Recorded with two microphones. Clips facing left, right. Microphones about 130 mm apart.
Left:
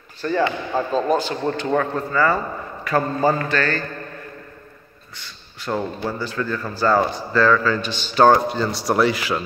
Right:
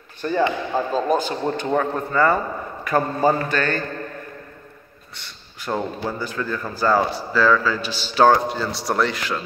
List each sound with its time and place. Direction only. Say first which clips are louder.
0.2 s speech: even; 20° right (ahead or behind)
0.7 s speech: left 1 dB; 5° right (ahead or behind)
5.7 s speech: left 1 dB; 15° right (ahead or behind); by 9.4 s 5° left (ahead or behind)